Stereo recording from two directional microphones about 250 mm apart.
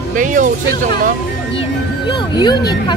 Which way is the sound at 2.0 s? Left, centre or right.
Centre.